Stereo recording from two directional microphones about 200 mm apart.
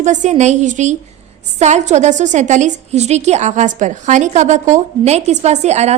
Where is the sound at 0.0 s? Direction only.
35° right (ahead or behind).